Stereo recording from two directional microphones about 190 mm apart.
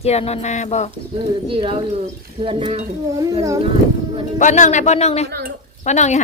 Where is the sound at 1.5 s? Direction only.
25° right (ahead or behind).